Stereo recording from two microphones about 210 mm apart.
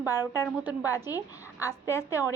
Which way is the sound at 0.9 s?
15° left (ahead or behind).